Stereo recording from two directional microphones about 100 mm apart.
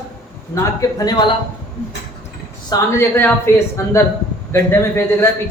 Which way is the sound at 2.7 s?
25° left (ahead or behind).